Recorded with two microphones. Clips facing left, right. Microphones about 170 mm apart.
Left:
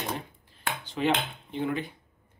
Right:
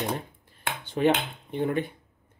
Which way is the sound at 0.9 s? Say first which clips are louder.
Right 4 dB; 50° right (ahead or behind).